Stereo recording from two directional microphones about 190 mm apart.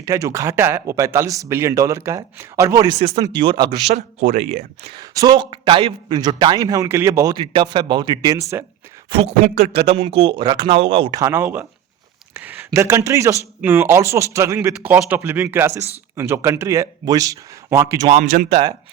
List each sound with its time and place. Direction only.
0.0 s a man's voice: 15° right (ahead or behind)
3.9 s speech: 40° right (ahead or behind)
5.1 s a man's voice: 20° right (ahead or behind)
9.0 s a man's voice: 25° right (ahead or behind)
11.2 s speech: 10° right (ahead or behind)
18.1 s speech: 40° right (ahead or behind)